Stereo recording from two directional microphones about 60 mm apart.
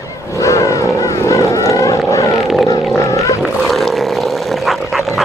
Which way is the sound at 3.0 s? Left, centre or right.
Left.